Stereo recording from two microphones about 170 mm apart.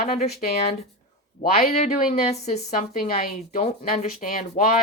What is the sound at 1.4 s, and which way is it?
Speech, 60° left (ahead or behind).